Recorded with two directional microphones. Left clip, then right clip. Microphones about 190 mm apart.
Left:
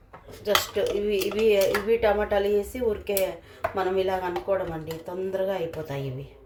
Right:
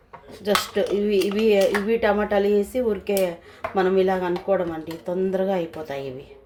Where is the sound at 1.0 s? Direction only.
40° right (ahead or behind).